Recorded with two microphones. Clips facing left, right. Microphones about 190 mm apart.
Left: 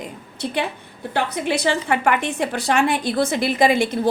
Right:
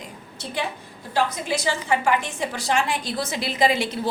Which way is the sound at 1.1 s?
65° left (ahead or behind).